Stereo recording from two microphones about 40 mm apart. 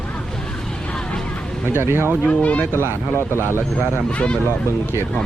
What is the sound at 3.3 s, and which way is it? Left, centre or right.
Speech, right.